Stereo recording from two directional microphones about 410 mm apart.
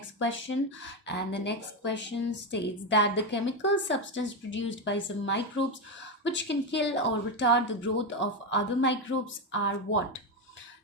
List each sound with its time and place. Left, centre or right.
0.2 s speech: left